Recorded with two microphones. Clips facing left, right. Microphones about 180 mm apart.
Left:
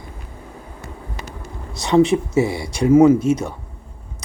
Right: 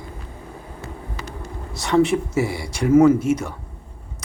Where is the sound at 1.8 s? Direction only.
20° left (ahead or behind).